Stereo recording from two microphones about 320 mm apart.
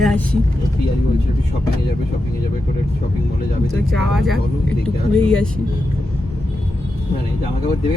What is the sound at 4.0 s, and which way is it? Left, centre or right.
Speech, centre.